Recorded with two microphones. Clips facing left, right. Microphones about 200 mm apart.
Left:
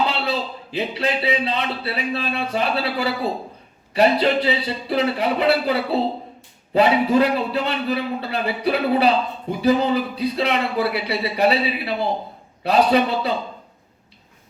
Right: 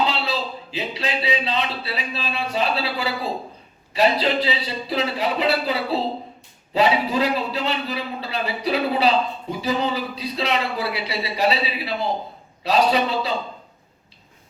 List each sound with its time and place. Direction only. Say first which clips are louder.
0.7 s a man's voice: left 5 dB; 55° left (ahead or behind)